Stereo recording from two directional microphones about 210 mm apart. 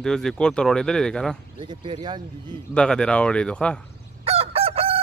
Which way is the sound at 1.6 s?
25° right (ahead or behind).